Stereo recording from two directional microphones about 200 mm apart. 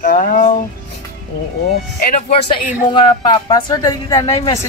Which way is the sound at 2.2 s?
25° left (ahead or behind).